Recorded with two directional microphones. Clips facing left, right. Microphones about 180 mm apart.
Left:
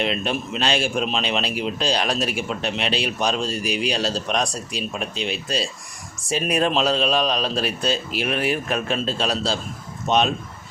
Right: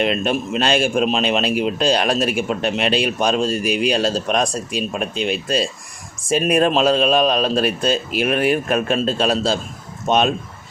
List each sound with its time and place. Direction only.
0.0 s a man's voice: 50° right (ahead or behind)